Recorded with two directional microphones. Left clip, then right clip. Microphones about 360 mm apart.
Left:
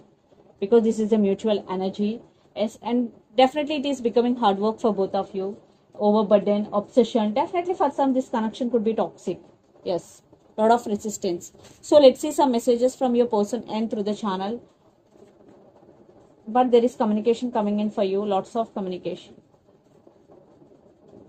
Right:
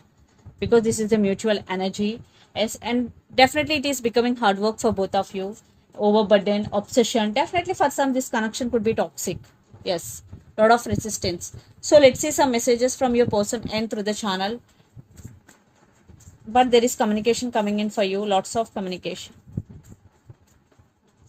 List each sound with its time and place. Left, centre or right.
0.6 s a woman's voice: centre
16.5 s a woman's voice: centre